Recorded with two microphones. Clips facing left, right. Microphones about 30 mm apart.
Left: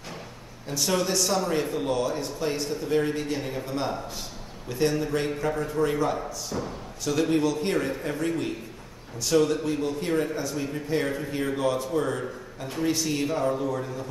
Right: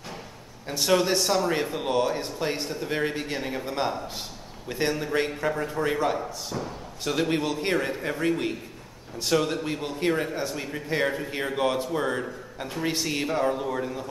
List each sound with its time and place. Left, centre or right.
0.7 s a man's voice: right